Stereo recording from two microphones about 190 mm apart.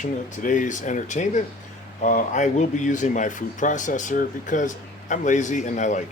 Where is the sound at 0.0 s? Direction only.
40° left (ahead or behind).